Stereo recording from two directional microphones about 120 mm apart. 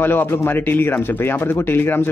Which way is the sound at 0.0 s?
15° left (ahead or behind).